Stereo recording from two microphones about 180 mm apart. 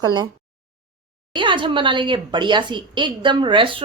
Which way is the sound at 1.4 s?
25° right (ahead or behind).